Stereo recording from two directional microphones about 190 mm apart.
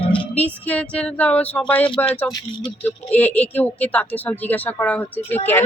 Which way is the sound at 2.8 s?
10° left (ahead or behind).